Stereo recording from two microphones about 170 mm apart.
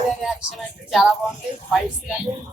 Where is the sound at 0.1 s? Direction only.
Centre (ahead or behind).